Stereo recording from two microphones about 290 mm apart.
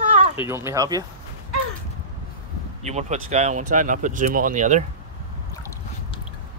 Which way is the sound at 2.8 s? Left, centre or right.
Right.